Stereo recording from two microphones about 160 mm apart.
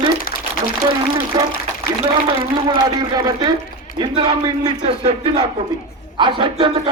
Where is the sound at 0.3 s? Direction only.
60° left (ahead or behind).